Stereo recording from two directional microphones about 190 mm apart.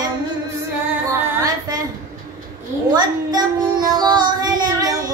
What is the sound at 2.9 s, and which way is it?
Child singing, 20° right (ahead or behind).